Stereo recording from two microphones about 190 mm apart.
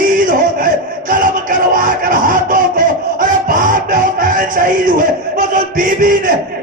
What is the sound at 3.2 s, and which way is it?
Music, 45° right (ahead or behind).